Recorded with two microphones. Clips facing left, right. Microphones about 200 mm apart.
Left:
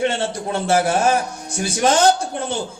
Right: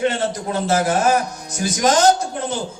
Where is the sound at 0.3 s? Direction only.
30° left (ahead or behind).